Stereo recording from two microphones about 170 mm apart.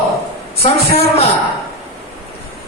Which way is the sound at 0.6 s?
35° left (ahead or behind).